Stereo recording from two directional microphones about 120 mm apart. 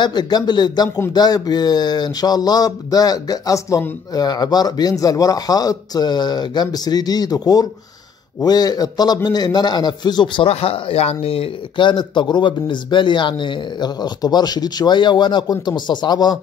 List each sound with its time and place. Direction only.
0.0 s a man's voice: 35° left (ahead or behind)